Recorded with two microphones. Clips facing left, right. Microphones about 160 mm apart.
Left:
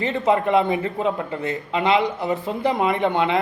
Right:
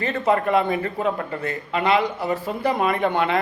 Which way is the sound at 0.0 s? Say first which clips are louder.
Left 1 dB; 20° left (ahead or behind).